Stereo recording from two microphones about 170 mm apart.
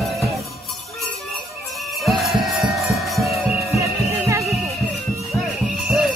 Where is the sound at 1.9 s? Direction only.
Centre (ahead or behind).